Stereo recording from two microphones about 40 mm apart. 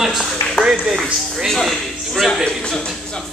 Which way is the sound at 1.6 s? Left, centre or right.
Centre.